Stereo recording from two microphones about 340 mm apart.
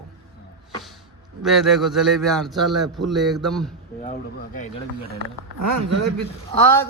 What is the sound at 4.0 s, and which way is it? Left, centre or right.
Speech, left.